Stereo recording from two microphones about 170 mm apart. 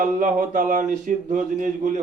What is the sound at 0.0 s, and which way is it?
Speech, 50° right (ahead or behind).